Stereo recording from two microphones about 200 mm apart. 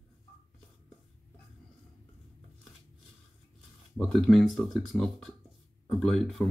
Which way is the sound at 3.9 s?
5° left (ahead or behind).